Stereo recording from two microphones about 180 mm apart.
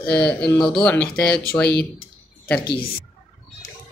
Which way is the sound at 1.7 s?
60° left (ahead or behind).